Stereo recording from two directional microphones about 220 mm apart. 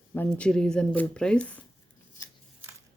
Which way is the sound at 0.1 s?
5° left (ahead or behind).